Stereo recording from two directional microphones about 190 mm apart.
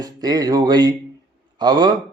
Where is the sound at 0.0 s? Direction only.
20° right (ahead or behind).